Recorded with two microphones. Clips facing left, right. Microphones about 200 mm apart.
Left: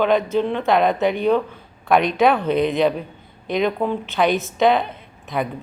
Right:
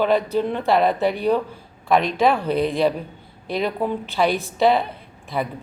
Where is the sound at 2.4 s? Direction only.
30° right (ahead or behind).